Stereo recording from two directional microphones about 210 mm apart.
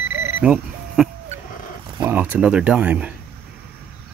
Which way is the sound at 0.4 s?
5° right (ahead or behind).